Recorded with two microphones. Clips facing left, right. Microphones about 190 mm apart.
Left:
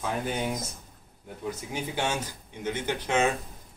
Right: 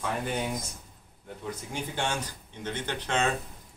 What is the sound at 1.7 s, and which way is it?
Speech, 5° left (ahead or behind).